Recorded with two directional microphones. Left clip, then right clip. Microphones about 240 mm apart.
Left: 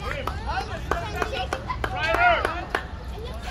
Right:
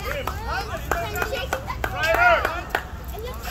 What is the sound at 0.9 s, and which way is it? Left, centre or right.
Run, left.